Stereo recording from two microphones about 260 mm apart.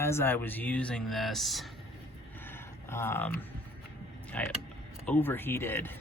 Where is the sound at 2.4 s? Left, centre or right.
Centre.